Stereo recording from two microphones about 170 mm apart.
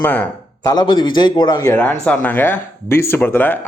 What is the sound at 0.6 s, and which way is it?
A man's voice, 25° left (ahead or behind).